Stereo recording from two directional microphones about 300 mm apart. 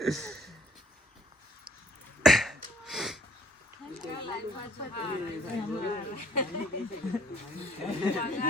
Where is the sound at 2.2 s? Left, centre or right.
Centre.